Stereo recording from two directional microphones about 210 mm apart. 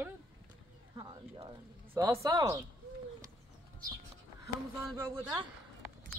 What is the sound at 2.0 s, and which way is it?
Speech, 15° right (ahead or behind).